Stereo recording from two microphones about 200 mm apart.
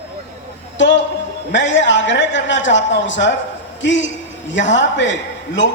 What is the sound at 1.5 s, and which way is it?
A man's voice, 65° left (ahead or behind).